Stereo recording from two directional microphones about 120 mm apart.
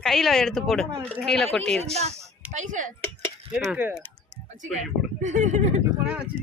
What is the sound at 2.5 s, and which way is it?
Speech, 90° right.